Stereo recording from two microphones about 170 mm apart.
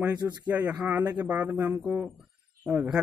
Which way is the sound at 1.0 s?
20° right (ahead or behind).